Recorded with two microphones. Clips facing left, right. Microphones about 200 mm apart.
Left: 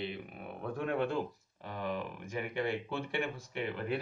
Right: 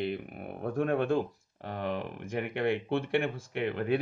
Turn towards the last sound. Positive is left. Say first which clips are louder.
# right 6 dB
turn(degrees=-65)  # may be behind; listen again after turning